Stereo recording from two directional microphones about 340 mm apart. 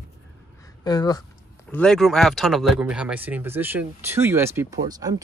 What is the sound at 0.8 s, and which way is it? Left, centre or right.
Speech, centre.